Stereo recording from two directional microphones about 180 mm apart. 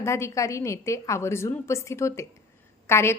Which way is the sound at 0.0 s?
15° left (ahead or behind).